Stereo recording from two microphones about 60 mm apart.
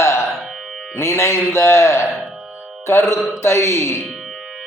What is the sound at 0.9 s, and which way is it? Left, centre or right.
A man's voice, left.